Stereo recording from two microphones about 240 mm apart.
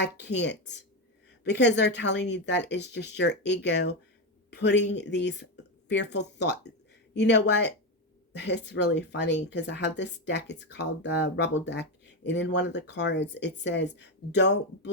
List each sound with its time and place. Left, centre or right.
0.0 s speech: left